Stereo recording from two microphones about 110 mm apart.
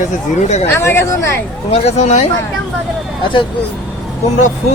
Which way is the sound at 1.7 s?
80° left.